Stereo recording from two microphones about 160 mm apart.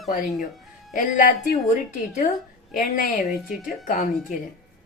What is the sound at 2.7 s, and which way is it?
A woman's voice, 55° left (ahead or behind).